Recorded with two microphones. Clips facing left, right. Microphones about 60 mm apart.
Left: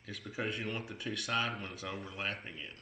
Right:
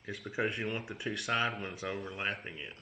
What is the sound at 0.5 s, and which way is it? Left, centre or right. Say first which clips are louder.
Speech: right 2 dB; centre.